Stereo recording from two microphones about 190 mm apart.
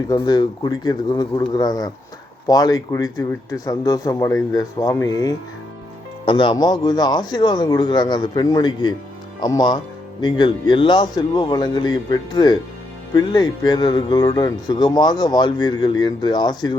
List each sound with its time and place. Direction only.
0.1 s speech: 20° left (ahead or behind)